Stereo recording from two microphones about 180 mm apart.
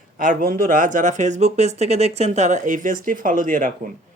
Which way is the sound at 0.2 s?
45° right (ahead or behind).